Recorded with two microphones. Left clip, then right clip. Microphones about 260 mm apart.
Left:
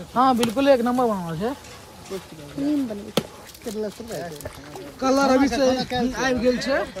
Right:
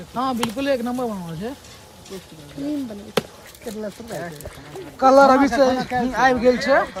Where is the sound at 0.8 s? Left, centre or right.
Left.